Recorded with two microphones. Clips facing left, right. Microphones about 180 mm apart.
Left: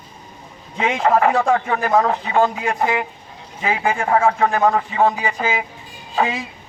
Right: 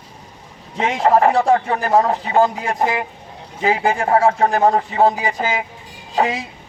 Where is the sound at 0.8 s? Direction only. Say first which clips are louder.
Right 2 dB; 35° right (ahead or behind).